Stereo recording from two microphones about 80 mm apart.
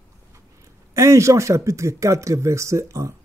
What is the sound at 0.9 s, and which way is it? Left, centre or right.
Speech, right.